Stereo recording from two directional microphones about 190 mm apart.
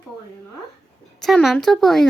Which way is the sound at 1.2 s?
Centre (ahead or behind).